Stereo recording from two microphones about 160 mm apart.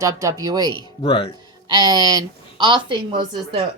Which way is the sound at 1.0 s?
35° left (ahead or behind).